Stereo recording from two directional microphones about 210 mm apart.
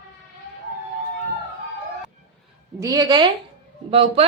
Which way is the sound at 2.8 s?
15° right (ahead or behind).